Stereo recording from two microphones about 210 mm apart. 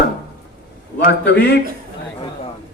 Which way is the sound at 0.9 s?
55° left (ahead or behind).